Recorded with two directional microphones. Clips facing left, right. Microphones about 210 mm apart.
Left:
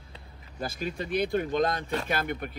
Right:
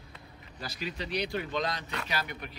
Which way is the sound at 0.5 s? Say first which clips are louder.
Left 5 dB; 50° left (ahead or behind).